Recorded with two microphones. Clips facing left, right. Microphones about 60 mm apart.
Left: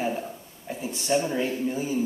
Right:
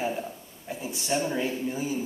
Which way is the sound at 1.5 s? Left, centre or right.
Centre.